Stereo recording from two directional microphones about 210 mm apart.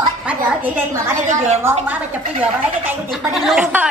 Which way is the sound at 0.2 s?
10° right (ahead or behind).